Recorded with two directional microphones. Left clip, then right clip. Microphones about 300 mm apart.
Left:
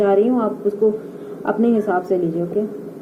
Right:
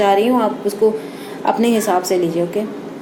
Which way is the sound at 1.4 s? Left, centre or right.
Centre.